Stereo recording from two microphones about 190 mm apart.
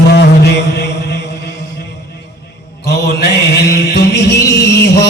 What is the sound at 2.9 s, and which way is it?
Music, 60° left (ahead or behind).